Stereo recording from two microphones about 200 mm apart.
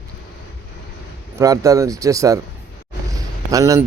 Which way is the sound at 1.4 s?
15° right (ahead or behind).